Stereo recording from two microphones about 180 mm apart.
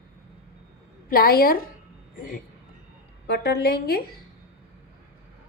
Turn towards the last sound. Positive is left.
turn(degrees=60)  # may be behind; listen again after turning